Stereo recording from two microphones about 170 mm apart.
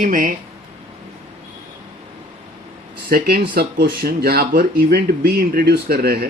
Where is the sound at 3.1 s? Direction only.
60° right (ahead or behind).